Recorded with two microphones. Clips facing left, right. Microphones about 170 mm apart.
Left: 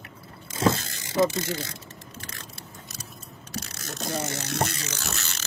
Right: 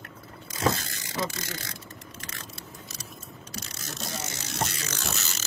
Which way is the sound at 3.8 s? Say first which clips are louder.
Left 7 dB; 55° left (ahead or behind).